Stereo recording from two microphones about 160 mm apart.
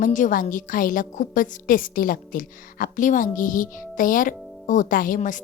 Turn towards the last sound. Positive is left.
turn(degrees=55)  # may be behind; listen again after turning